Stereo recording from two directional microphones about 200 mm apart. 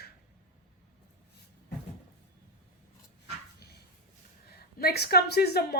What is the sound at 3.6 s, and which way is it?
Dog, 55° left (ahead or behind).